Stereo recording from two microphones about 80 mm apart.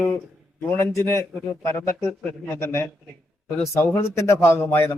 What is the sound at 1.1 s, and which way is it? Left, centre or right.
A man's voice, left.